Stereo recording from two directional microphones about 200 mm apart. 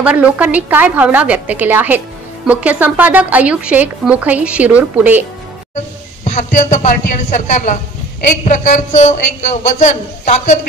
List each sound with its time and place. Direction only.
0.0 s a woman's voice: 5° right (ahead or behind)
6.2 s a man's voice: 35° left (ahead or behind)